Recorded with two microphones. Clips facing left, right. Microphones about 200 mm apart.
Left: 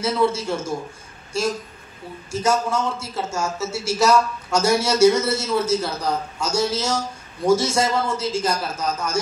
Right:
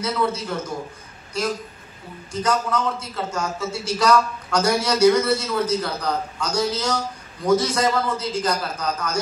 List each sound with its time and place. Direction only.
0.0 s a man's voice: 25° left (ahead or behind)
2.3 s a man's voice: 25° left (ahead or behind)